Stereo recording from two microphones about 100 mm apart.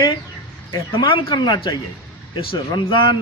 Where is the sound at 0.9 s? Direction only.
55° left (ahead or behind).